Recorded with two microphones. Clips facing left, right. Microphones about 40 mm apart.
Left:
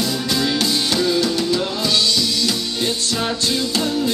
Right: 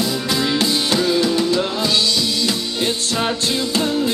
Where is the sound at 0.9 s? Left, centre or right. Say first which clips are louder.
Right 2 dB; centre.